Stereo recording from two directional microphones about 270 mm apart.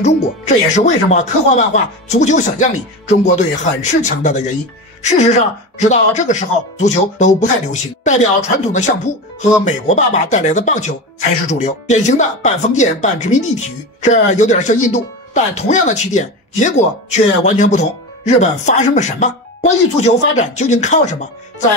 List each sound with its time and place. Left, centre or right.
0.7 s speech: left